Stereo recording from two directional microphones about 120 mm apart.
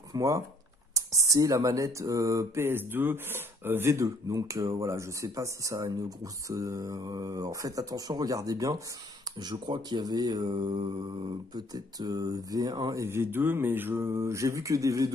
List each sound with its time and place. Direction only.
0.1 s speech: 25° right (ahead or behind)